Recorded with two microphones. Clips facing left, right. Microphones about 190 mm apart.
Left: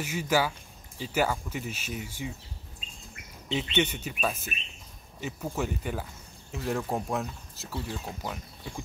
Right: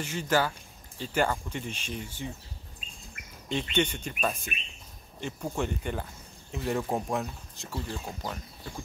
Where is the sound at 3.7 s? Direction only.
5° left (ahead or behind).